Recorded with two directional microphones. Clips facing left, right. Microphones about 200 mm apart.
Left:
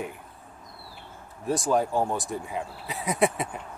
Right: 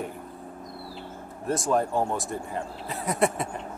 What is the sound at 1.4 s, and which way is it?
Speech, centre (ahead or behind).